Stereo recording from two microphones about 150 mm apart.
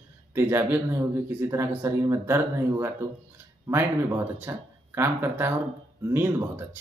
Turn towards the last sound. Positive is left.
turn(degrees=-15)  # may be behind; listen again after turning